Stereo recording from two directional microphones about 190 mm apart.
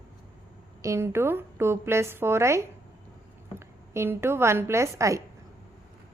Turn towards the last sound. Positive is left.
turn(degrees=-15)  # may be behind; listen again after turning